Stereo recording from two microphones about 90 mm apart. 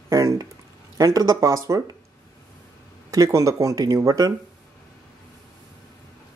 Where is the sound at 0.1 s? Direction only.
40° right (ahead or behind).